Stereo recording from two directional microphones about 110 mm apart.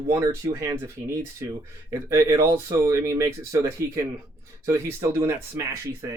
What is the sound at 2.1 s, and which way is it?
Speech, 30° right (ahead or behind).